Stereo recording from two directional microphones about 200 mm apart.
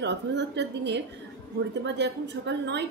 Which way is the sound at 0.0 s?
60° right (ahead or behind).